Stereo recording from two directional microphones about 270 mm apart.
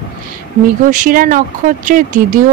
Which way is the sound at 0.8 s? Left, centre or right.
Right.